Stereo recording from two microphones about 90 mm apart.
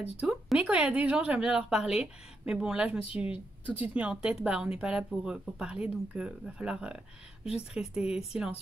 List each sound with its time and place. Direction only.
0.2 s speech: 5° right (ahead or behind)